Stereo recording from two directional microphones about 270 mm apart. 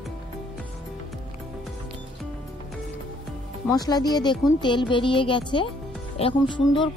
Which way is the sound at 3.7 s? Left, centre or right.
Centre.